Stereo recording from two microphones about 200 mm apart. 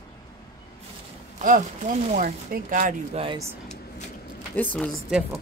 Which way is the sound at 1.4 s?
40° right (ahead or behind).